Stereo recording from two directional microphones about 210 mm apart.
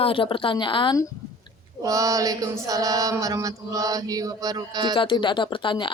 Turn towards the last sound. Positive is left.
turn(degrees=25)  # may be behind; listen again after turning